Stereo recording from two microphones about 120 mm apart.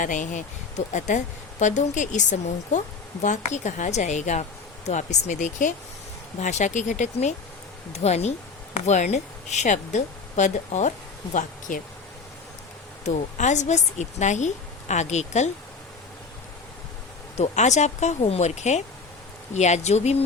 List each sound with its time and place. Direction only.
0.0 s a woman's voice: 90° left
6.4 s speech: 75° left (ahead or behind)
7.9 s a woman's voice: 65° left (ahead or behind)
13.1 s a woman's voice: 85° left
17.3 s a woman's voice: 70° left (ahead or behind)